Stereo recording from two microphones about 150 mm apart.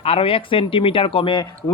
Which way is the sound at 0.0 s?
40° left (ahead or behind).